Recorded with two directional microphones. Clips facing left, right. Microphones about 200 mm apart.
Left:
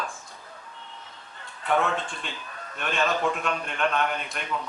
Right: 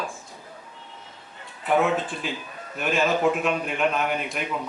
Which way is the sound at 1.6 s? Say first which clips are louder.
Right 4 dB; 5° right (ahead or behind).